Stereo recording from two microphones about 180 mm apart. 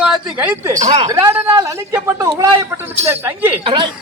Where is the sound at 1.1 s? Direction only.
15° right (ahead or behind).